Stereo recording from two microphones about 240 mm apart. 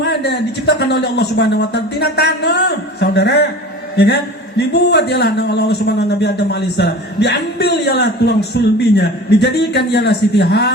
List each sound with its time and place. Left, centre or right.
0.0 s speech: left